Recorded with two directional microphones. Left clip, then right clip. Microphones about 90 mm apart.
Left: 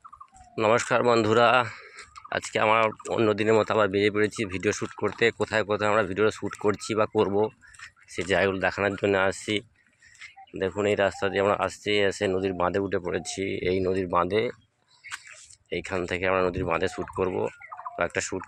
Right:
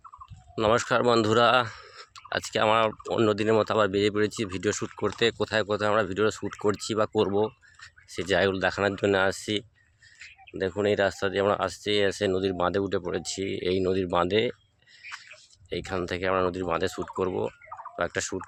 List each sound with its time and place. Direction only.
0.5 s speech: 20° right (ahead or behind)
1.0 s speech: 30° right (ahead or behind)
1.3 s speech: 20° right (ahead or behind)
3.2 s speech: 15° right (ahead or behind)
5.0 s speech: 25° right (ahead or behind)
8.4 s speech: 35° right (ahead or behind)
9.3 s speech: 15° right (ahead or behind)
10.2 s a sound: 20° right (ahead or behind)
10.9 s speech: 25° right (ahead or behind)
12.4 s speech: 35° right (ahead or behind)
13.0 s speech: 20° right (ahead or behind)
13.8 s speech: 45° right (ahead or behind)
15.7 s speech: 20° right (ahead or behind)